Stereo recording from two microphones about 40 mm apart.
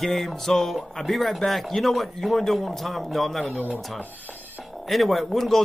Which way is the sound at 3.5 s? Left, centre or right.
Right.